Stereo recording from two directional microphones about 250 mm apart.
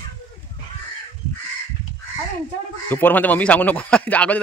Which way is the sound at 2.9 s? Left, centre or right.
Centre.